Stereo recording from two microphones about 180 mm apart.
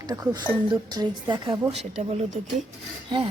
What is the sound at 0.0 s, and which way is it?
Speech, 20° right (ahead or behind).